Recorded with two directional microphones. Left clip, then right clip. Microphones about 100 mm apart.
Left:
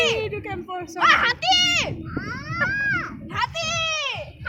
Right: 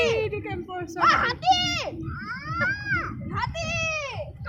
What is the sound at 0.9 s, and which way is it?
Speech, 25° left (ahead or behind).